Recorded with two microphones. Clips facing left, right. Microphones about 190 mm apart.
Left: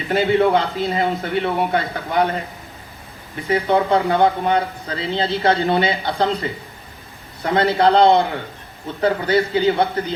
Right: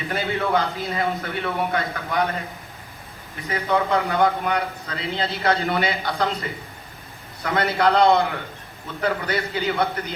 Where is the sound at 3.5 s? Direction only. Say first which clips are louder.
Left 5 dB; 30° left (ahead or behind).